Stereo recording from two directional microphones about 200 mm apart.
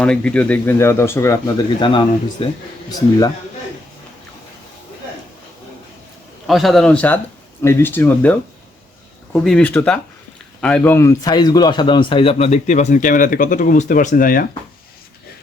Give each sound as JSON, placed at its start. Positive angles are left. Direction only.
{"t": 0.0, "sound": "speech", "side_deg": 5}
{"t": 6.5, "sound": "a man's voice", "side_deg": 0}